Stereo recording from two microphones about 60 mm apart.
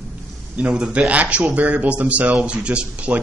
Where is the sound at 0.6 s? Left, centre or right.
Right.